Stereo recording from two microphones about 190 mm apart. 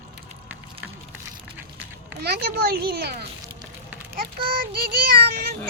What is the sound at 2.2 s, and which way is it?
Speech, 55° right (ahead or behind).